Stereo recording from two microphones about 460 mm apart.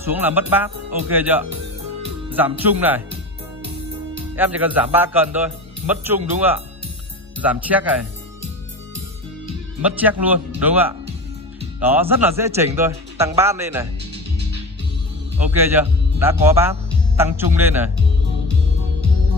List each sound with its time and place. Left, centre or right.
0.0 s a man's voice: centre
4.4 s a man's voice: centre
7.7 s a man's voice: centre
9.8 s a man's voice: centre
15.4 s a man's voice: centre